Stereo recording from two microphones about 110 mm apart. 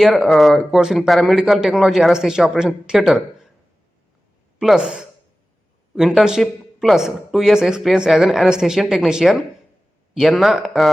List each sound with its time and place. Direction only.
0.0 s speech: centre (ahead or behind)
4.6 s speech: 5° right (ahead or behind)